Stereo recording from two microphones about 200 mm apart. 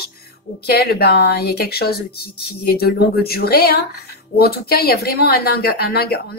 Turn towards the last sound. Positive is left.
turn(degrees=50)  # may be behind; listen again after turning